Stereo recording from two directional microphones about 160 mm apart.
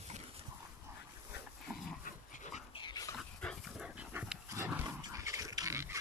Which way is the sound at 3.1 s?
5° right (ahead or behind).